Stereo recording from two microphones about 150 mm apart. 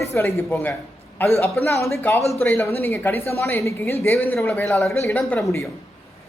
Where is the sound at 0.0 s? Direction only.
15° left (ahead or behind).